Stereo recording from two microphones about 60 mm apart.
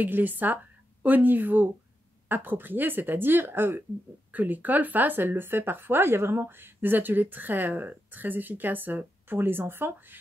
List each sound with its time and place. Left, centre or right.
0.0 s a woman's voice: right